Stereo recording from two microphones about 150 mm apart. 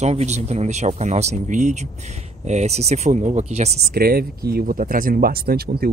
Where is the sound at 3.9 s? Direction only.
90° right.